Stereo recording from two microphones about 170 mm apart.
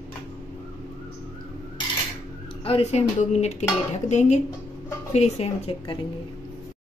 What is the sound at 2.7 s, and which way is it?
Speech, 35° left (ahead or behind).